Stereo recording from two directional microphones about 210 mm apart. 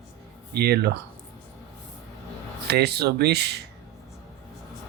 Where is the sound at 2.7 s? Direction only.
50° right (ahead or behind).